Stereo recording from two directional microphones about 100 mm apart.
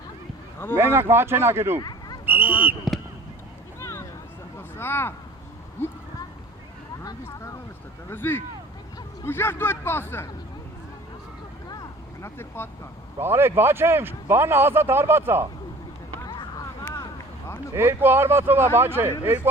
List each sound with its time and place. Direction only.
0.8 s speech: 25° right (ahead or behind)
1.8 s a sound: 45° left (ahead or behind)
2.2 s speech: 20° right (ahead or behind)
3.8 s a sound: 25° left (ahead or behind)
7.3 s a man's voice: 30° left (ahead or behind)
12.2 s a man's voice: 25° left (ahead or behind)
13.1 s speech: 25° right (ahead or behind)
16.2 s vehicle: 50° left (ahead or behind)
16.8 s vehicle: 30° left (ahead or behind)
17.7 s speech: 20° right (ahead or behind)